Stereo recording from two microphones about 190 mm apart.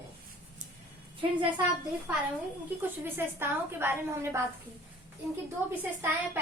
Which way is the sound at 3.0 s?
10° right (ahead or behind).